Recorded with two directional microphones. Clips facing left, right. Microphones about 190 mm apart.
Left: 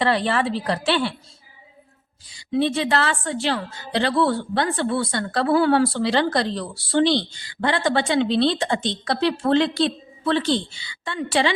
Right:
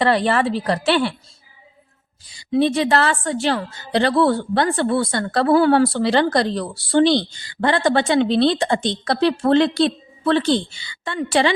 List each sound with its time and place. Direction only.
0.0 s a woman's voice: 45° right (ahead or behind)
2.3 s a woman's voice: 40° right (ahead or behind)